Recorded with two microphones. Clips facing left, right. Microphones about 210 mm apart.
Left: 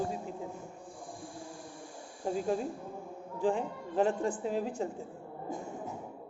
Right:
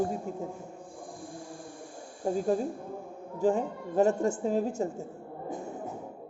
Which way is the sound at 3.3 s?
40° right (ahead or behind).